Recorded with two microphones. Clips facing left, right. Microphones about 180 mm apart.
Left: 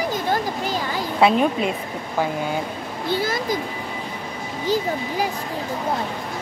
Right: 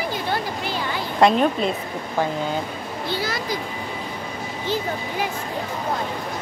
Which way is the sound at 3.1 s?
50° left (ahead or behind).